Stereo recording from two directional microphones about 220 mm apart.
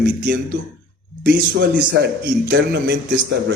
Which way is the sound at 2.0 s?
50° right (ahead or behind).